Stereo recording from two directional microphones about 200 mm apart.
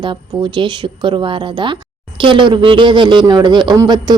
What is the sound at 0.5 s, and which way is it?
Speech, 25° right (ahead or behind).